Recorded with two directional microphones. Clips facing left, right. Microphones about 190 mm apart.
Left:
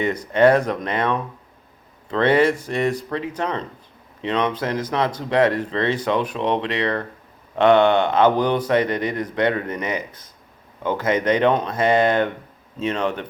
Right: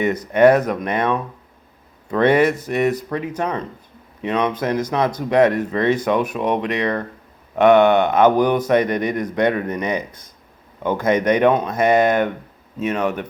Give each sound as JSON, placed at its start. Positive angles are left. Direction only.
{"t": 0.3, "sound": "speech", "side_deg": -10}